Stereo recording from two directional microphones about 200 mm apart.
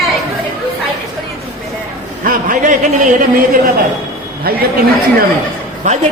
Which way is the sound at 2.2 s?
45° right (ahead or behind).